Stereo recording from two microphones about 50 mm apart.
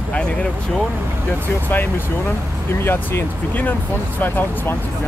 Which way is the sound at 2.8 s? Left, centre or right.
Left.